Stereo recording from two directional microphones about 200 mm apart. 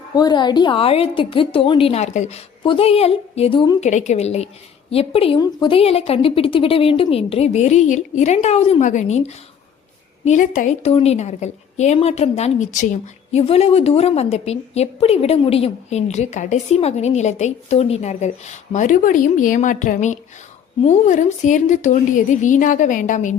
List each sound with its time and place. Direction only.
0.2 s a woman's voice: 20° left (ahead or behind)
3.8 s a woman's voice: 35° left (ahead or behind)